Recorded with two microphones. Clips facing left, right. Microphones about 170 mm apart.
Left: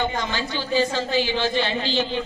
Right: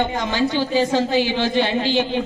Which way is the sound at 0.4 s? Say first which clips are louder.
Right 5 dB; 55° right (ahead or behind).